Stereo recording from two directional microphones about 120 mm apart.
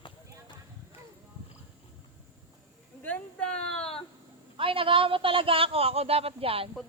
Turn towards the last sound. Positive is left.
turn(degrees=-50)  # may be behind; listen again after turning